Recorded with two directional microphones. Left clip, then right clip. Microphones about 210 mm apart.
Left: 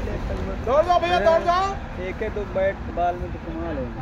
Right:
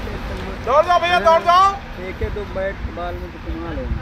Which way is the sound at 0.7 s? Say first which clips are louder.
Right 4 dB; 30° right (ahead or behind).